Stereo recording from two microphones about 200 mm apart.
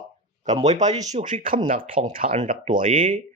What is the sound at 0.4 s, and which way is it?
Speech, 35° right (ahead or behind).